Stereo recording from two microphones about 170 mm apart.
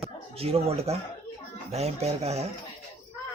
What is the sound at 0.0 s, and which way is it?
Speech, 35° right (ahead or behind).